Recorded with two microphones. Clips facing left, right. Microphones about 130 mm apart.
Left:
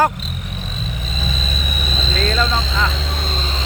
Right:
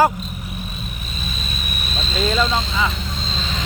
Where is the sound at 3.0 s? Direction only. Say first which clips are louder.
Left 3 dB; 65° left (ahead or behind).